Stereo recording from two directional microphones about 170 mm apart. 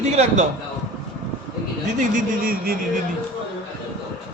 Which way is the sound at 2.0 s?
55° right (ahead or behind).